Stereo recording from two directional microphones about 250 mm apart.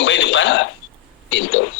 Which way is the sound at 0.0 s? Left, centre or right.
Left.